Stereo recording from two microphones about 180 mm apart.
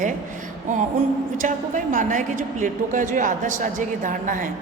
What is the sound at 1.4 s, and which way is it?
A woman's voice, 45° right (ahead or behind).